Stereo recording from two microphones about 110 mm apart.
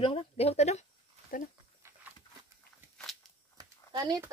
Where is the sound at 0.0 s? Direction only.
60° left (ahead or behind); by 0.8 s 90° left.